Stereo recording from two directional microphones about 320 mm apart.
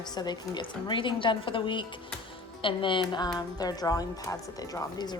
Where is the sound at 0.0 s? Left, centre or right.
Centre.